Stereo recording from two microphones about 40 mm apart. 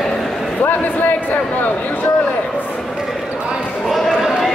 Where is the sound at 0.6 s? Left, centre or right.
Left.